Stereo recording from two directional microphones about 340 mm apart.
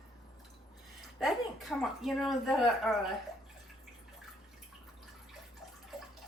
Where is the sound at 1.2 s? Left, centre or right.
Centre.